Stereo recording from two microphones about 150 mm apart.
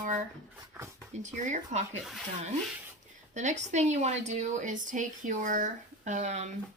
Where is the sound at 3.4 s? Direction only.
50° right (ahead or behind).